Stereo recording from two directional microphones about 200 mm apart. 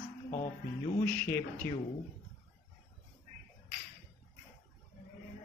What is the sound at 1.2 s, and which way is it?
Speech, 10° left (ahead or behind).